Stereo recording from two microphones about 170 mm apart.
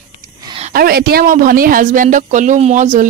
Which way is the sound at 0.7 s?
60° right (ahead or behind).